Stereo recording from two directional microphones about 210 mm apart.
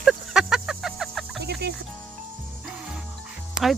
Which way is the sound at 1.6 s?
50° right (ahead or behind).